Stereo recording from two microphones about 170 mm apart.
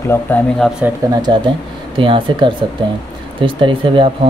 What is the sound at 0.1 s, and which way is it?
Speech, 15° left (ahead or behind).